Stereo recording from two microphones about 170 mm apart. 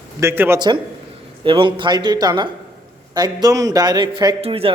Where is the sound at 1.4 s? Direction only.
30° right (ahead or behind).